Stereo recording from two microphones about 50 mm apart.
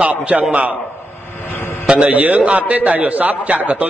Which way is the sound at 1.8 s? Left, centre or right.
Right.